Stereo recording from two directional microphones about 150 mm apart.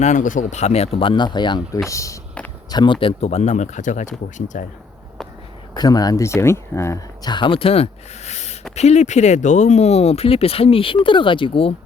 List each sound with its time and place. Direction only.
0.0 s speech: 55° left (ahead or behind)
5.7 s speech: 25° left (ahead or behind)